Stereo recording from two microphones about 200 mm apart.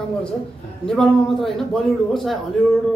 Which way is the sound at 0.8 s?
Centre (ahead or behind).